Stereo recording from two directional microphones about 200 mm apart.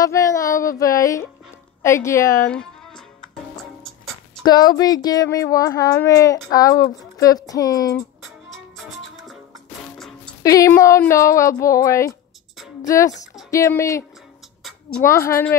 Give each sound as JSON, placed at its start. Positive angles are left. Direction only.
{"t": 0.0, "sound": "speech", "side_deg": 15}
{"t": 4.4, "sound": "speech", "side_deg": 20}
{"t": 9.9, "sound": "music", "side_deg": 0}
{"t": 10.4, "sound": "speech", "side_deg": 15}
{"t": 15.0, "sound": "speech", "side_deg": 15}